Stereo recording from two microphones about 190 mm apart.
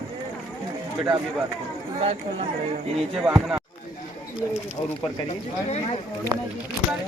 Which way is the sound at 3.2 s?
5° right (ahead or behind).